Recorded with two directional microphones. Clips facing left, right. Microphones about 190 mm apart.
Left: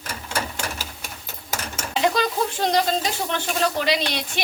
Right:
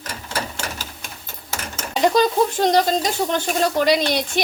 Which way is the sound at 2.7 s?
40° right (ahead or behind).